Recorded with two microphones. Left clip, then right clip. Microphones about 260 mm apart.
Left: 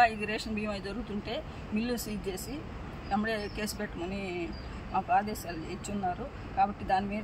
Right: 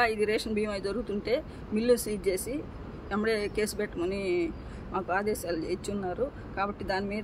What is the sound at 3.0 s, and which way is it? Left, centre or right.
Speech, centre.